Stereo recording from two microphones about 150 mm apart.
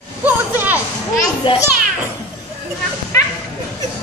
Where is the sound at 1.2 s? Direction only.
30° left (ahead or behind).